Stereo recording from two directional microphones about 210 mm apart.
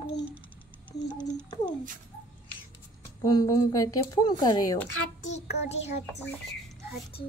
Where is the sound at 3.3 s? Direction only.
20° left (ahead or behind).